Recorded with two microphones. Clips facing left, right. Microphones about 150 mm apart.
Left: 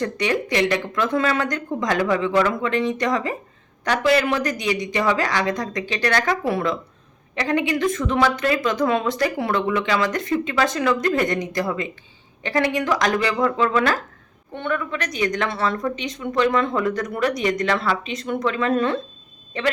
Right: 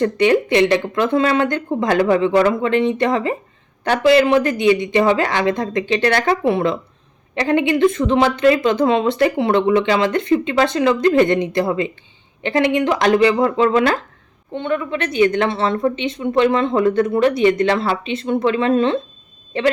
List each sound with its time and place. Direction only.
0.0 s speech: 30° right (ahead or behind)